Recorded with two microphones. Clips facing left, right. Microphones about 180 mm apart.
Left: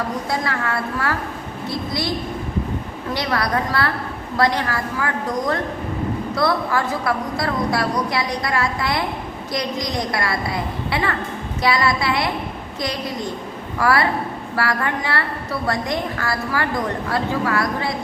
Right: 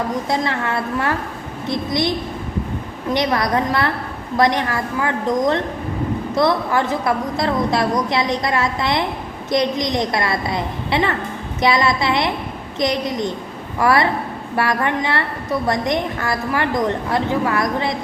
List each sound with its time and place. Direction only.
0.3 s a woman's voice: 20° right (ahead or behind)